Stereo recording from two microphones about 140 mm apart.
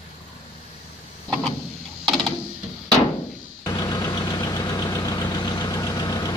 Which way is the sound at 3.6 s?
25° left (ahead or behind).